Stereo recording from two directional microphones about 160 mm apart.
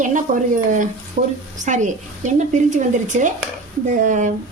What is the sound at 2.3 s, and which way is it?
Speech, 50° right (ahead or behind).